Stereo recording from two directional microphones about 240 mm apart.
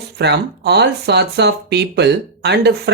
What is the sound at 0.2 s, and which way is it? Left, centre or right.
Speech, right.